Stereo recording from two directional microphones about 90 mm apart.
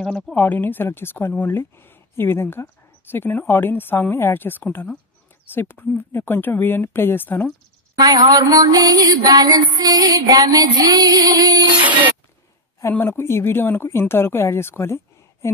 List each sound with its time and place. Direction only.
0.0 s speech: 10° left (ahead or behind)
0.4 s speech: 20° left (ahead or behind)
8.0 s mantra: 45° right (ahead or behind)
12.9 s speech: 25° left (ahead or behind)